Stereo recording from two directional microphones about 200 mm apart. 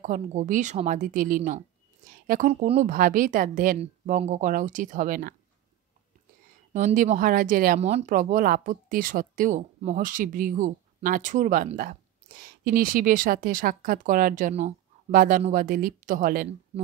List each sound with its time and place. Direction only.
0.0 s a woman's voice: 40° right (ahead or behind)
2.0 s a sound: 45° right (ahead or behind)
2.6 s a woman's voice: 35° right (ahead or behind)
6.7 s speech: 40° right (ahead or behind)